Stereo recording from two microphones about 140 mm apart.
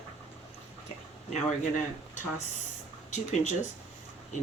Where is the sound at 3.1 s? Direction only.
55° left (ahead or behind).